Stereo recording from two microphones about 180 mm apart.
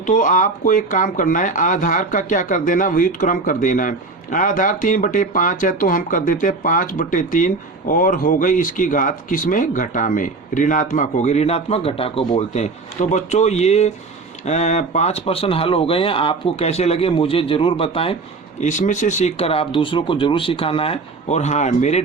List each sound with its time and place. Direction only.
0.0 s speech: 45° left (ahead or behind)
18.6 s speech: 45° left (ahead or behind)